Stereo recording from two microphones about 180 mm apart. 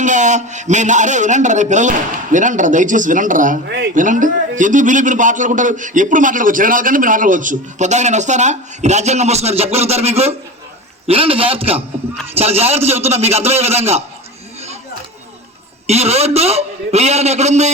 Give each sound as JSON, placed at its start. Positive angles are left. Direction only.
{"t": 0.0, "sound": "a man's voice", "side_deg": -45}
{"t": 3.7, "sound": "speech", "side_deg": -70}
{"t": 3.9, "sound": "a man's voice", "side_deg": -45}
{"t": 15.9, "sound": "a man's voice", "side_deg": -35}